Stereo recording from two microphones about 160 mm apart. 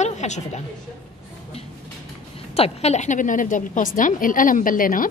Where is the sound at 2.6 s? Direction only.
40° left (ahead or behind); by 5.1 s 60° left (ahead or behind).